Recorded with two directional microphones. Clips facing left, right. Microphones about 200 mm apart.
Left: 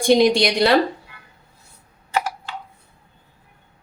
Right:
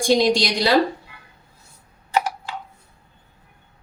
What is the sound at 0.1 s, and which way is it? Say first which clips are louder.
Speech: left 3 dB; 60° left (ahead or behind).